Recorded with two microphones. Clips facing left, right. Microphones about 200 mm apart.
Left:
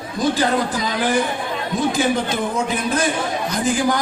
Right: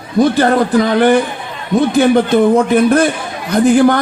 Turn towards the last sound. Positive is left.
turn(degrees=-60)  # may be behind; listen again after turning